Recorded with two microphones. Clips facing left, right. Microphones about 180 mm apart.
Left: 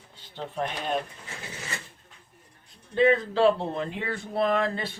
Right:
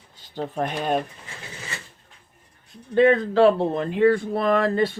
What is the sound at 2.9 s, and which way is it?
Speech, 55° right (ahead or behind).